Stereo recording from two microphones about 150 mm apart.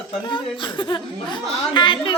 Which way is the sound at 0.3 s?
35° left (ahead or behind).